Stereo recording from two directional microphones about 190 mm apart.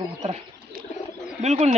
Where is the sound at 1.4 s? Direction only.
35° right (ahead or behind).